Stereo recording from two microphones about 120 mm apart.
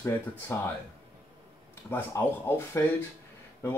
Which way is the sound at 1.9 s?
20° left (ahead or behind).